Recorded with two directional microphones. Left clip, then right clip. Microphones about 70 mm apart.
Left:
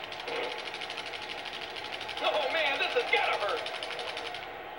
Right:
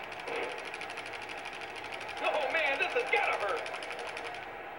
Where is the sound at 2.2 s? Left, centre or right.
Right.